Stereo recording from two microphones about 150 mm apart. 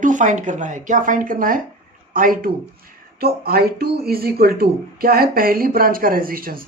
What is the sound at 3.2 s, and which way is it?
Speech, 90° right.